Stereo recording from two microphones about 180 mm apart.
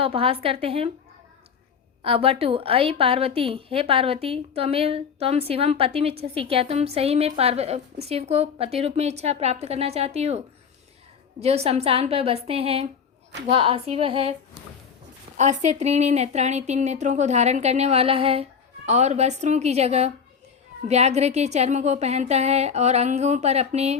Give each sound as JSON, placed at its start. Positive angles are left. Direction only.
{"t": 0.0, "sound": "a woman's voice", "side_deg": -30}
{"t": 2.0, "sound": "a woman's voice", "side_deg": -35}
{"t": 15.4, "sound": "a woman's voice", "side_deg": -40}